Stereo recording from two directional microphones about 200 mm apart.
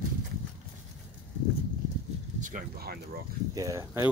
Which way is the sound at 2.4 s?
40° right (ahead or behind).